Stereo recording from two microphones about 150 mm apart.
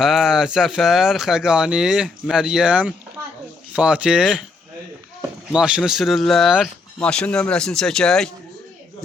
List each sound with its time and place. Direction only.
0.0 s speech: centre (ahead or behind)
3.2 s a sound: 20° right (ahead or behind)
3.8 s speech: 5° right (ahead or behind)
5.5 s speech: 5° right (ahead or behind)